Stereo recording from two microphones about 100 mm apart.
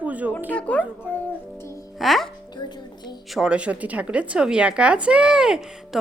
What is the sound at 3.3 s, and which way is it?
Speech, 10° right (ahead or behind).